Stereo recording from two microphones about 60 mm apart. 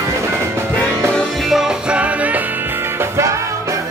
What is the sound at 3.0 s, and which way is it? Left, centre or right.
Music, right.